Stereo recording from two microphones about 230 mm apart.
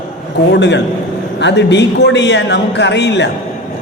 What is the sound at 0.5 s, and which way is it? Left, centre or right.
A man's voice, left.